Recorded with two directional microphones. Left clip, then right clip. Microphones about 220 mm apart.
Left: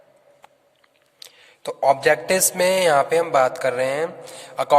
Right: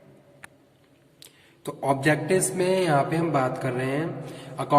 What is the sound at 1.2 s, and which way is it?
A man's voice, 45° left (ahead or behind).